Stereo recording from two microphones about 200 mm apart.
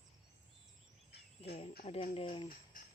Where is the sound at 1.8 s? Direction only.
30° left (ahead or behind).